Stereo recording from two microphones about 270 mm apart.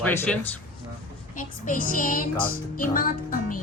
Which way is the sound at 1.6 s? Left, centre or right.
Left.